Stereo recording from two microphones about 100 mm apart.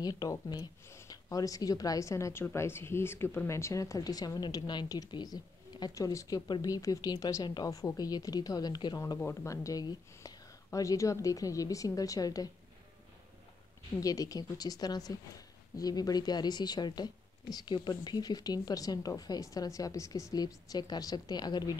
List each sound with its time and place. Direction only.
0.0 s a woman's voice: 40° left (ahead or behind)
9.2 s a woman's voice: 30° left (ahead or behind)
13.9 s a woman's voice: 35° left (ahead or behind)